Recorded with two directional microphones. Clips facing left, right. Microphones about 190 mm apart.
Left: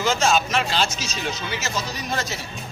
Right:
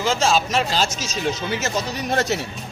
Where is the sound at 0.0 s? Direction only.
30° right (ahead or behind); by 2.4 s 65° right (ahead or behind).